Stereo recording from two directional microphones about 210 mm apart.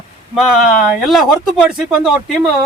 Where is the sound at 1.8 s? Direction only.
5° right (ahead or behind).